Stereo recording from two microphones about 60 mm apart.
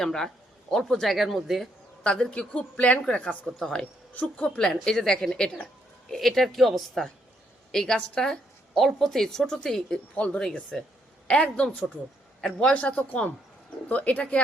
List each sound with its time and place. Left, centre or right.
0.0 s a woman's voice: centre
2.0 s a woman's voice: centre
3.4 s a woman's voice: centre
4.1 s a woman's voice: left
4.5 s a woman's voice: centre
10.2 s a woman's voice: left
10.7 s a woman's voice: centre